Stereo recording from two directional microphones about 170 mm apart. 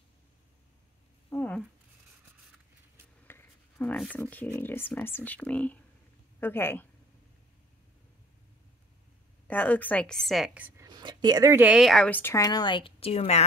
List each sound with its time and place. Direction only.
1.3 s a sound: 10° left (ahead or behind)
3.3 s speech: 10° left (ahead or behind)
9.5 s a woman's voice: 10° left (ahead or behind); by 10.9 s 10° right (ahead or behind)
10.9 s speech: 25° right (ahead or behind)
11.6 s speech: centre (ahead or behind); by 13.5 s 40° left (ahead or behind)